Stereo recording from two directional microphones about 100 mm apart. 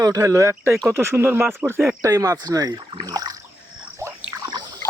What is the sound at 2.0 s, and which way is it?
Speech, 35° right (ahead or behind).